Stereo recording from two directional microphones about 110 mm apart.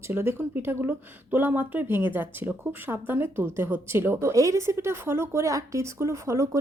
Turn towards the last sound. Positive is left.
turn(degrees=-30)  # may be behind; listen again after turning